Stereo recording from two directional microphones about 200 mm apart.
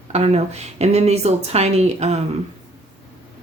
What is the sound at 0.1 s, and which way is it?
Speech, 30° right (ahead or behind).